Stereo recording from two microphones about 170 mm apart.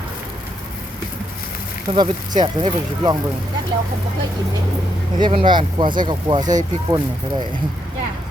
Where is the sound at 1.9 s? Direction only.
30° right (ahead or behind).